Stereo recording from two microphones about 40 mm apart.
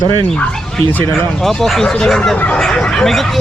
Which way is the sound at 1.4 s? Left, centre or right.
Centre.